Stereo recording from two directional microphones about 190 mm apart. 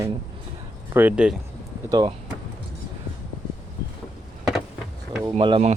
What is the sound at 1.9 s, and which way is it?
Speech, 20° right (ahead or behind).